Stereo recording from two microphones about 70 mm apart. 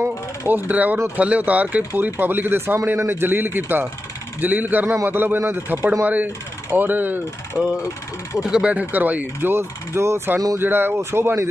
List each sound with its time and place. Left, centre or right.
0.5 s speech: right
8.4 s speech: centre; by 10.3 s right
10.6 s speech: right